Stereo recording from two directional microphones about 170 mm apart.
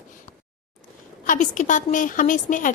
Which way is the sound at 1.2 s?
50° left (ahead or behind).